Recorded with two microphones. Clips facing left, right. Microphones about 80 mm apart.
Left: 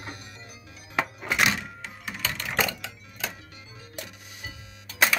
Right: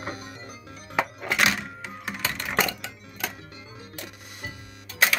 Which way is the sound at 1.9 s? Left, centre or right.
Right.